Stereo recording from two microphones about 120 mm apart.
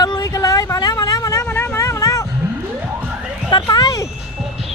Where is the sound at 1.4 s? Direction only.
20° left (ahead or behind).